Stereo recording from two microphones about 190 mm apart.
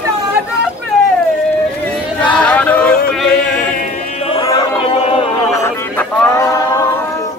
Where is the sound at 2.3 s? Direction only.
5° left (ahead or behind).